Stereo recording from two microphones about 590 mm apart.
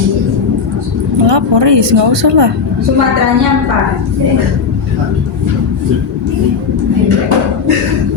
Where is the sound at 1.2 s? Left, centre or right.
Right.